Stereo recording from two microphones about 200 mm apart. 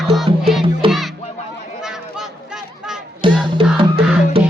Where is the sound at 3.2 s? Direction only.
25° right (ahead or behind).